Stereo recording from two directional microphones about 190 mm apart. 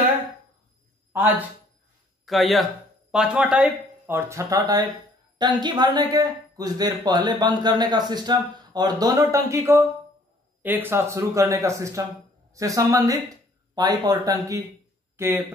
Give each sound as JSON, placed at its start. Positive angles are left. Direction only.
{"t": 1.1, "sound": "speech", "side_deg": -10}
{"t": 2.2, "sound": "speech", "side_deg": 0}